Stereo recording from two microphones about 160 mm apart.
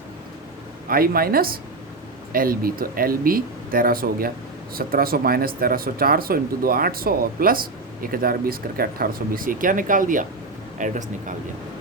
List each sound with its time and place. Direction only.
0.9 s speech: 65° right (ahead or behind)